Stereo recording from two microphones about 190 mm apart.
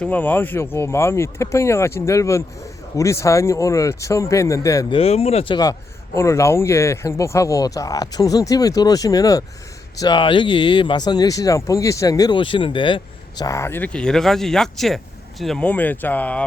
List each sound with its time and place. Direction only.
0.0 s speech: 10° left (ahead or behind)
4.9 s speech: 35° left (ahead or behind); by 16.5 s 5° left (ahead or behind)